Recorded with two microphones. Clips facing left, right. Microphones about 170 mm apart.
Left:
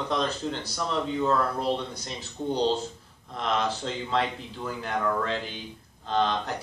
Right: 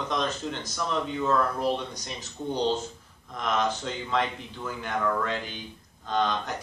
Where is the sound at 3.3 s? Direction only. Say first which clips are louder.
Even; 30° left (ahead or behind).